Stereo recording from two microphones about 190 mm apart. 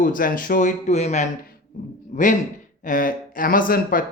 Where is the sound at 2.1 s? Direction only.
40° left (ahead or behind).